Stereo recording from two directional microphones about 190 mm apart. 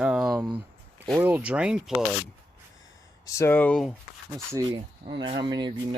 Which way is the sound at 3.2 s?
15° left (ahead or behind).